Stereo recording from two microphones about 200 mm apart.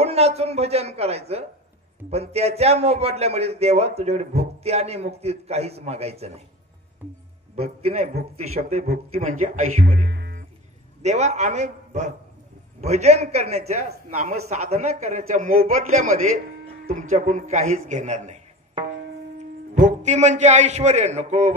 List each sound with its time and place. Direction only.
0.0 s a man's voice: 30° right (ahead or behind)
7.6 s a man's voice: 30° right (ahead or behind)
8.8 s speech: 50° right (ahead or behind)
10.0 s music: 60° right (ahead or behind)
11.0 s a man's voice: 35° right (ahead or behind)
20.0 s a man's voice: 35° right (ahead or behind)